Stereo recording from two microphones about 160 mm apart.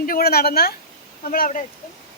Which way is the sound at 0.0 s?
70° left (ahead or behind).